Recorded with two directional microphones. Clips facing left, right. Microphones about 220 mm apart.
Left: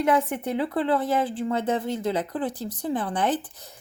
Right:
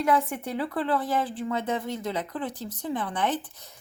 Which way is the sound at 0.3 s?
25° left (ahead or behind).